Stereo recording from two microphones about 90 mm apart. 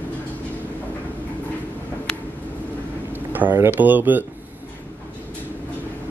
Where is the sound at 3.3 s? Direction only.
25° right (ahead or behind).